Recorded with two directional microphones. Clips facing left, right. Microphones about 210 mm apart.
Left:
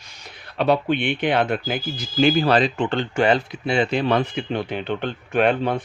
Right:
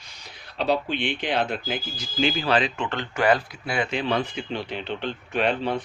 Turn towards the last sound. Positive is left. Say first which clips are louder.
# left 5 dB
turn(degrees=55)  # may be behind; listen again after turning